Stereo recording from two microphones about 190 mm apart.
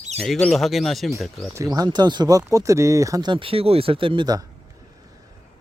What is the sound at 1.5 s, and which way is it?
Speech, 20° right (ahead or behind).